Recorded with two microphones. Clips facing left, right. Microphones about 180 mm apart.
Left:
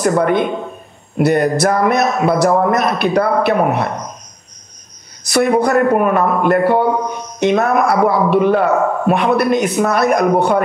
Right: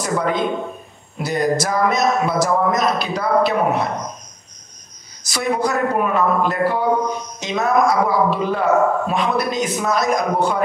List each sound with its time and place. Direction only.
0.0 s a man's voice: 60° left (ahead or behind)
5.2 s a man's voice: 60° left (ahead or behind)